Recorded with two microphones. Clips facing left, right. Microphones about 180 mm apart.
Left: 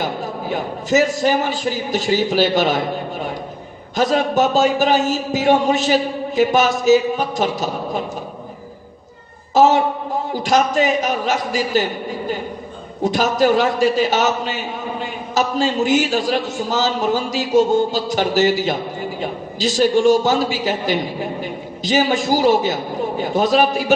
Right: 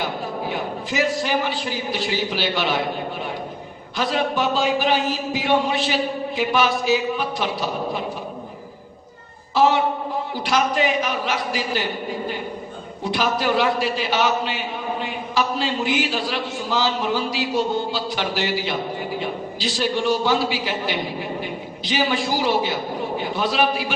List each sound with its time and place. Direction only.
0.5 s a man's voice: 45° left (ahead or behind)
3.9 s a man's voice: 45° left (ahead or behind)
9.6 s a man's voice: 45° left (ahead or behind)
13.0 s a man's voice: 45° left (ahead or behind)